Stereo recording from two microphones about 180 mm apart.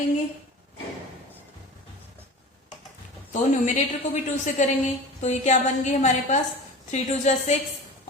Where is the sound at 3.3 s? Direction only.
40° left (ahead or behind).